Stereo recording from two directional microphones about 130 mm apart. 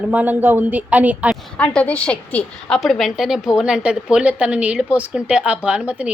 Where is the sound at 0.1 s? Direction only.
15° right (ahead or behind).